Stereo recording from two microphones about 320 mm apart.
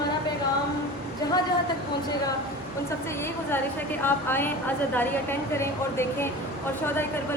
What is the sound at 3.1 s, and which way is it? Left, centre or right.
A woman's voice, centre.